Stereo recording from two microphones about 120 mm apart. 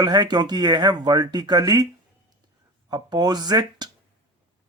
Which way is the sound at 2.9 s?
35° right (ahead or behind).